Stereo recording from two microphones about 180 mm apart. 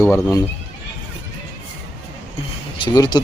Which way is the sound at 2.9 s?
20° left (ahead or behind).